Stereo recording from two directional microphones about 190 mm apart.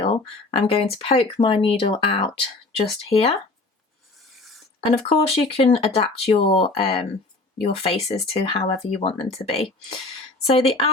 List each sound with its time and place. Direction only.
0.0 s speech: 30° left (ahead or behind)
5.0 s speech: 30° left (ahead or behind)